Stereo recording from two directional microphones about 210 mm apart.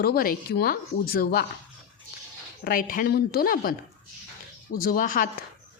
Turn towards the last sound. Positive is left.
turn(degrees=40)  # may be behind; listen again after turning